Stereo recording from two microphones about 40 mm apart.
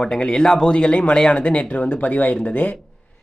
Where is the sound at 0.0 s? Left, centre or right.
Left.